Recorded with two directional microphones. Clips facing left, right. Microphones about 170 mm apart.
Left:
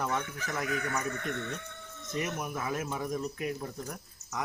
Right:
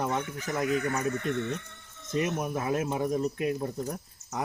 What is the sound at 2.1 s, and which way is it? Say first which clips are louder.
Speech: right 5 dB; 25° right (ahead or behind).